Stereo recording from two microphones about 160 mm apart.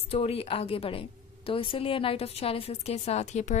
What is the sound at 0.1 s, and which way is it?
A woman's voice, 40° left (ahead or behind).